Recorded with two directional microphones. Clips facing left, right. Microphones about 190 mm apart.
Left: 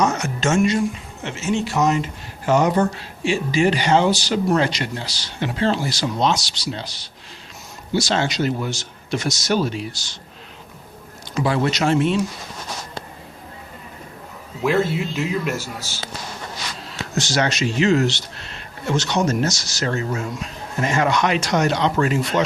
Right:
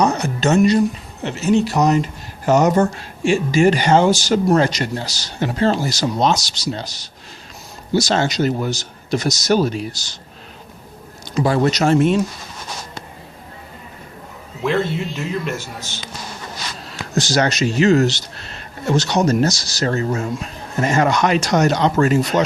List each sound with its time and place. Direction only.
0.0 s a man's voice: 35° right (ahead or behind)
11.4 s a man's voice: 40° right (ahead or behind)
14.6 s speech: 5° left (ahead or behind)
17.2 s a man's voice: 40° right (ahead or behind)